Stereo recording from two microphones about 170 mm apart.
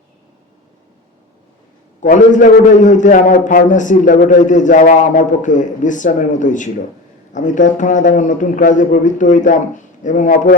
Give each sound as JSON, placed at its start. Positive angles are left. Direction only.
{"t": 2.0, "sound": "a man's voice", "side_deg": 45}